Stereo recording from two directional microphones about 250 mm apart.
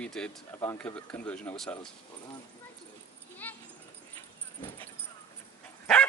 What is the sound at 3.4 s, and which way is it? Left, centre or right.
Dog, centre.